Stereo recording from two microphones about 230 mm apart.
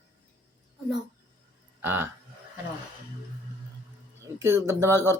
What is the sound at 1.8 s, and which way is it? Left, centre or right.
Speech, centre.